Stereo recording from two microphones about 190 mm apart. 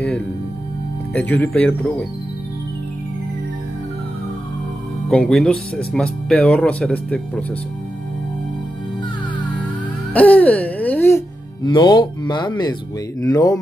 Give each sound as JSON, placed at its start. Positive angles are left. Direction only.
{"t": 1.1, "sound": "speech", "side_deg": 10}
{"t": 5.1, "sound": "speech", "side_deg": 5}
{"t": 10.1, "sound": "music", "side_deg": 10}
{"t": 11.6, "sound": "speech", "side_deg": 25}